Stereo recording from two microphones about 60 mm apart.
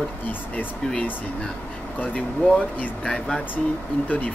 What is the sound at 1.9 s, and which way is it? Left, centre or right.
Speech, left.